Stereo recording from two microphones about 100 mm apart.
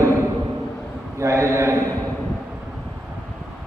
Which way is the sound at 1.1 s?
30° right (ahead or behind).